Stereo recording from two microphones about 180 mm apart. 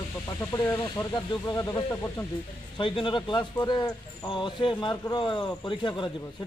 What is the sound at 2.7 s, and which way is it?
Speech, 25° left (ahead or behind).